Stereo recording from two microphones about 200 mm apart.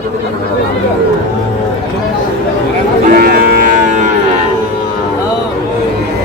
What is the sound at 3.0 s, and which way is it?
Cattle, 50° right (ahead or behind).